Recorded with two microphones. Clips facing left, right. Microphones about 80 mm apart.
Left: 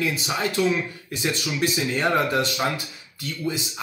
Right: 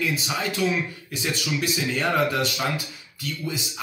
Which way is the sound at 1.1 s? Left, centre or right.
Left.